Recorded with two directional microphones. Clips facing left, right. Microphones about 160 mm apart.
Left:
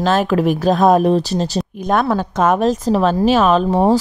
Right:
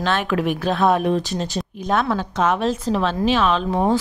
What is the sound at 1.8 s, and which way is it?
Speech, 50° left (ahead or behind).